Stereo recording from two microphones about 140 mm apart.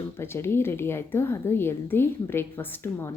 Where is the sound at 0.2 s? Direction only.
15° left (ahead or behind).